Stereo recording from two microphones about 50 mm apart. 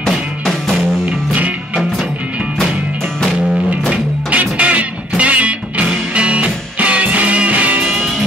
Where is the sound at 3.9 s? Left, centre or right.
Right.